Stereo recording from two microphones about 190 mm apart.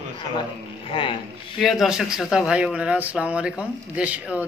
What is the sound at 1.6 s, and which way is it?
Speech, centre (ahead or behind).